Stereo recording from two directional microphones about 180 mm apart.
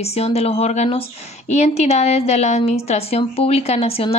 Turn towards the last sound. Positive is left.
turn(degrees=35)  # may be behind; listen again after turning